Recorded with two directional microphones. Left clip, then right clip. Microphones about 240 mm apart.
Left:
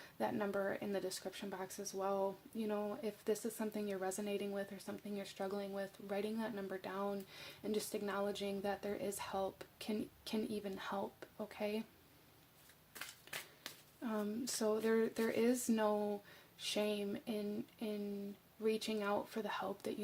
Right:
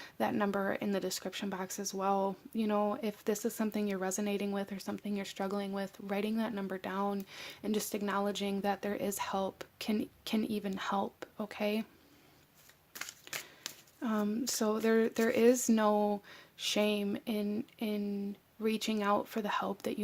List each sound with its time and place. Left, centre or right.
0.0 s speech: right
13.3 s a sound: right
13.7 s speech: right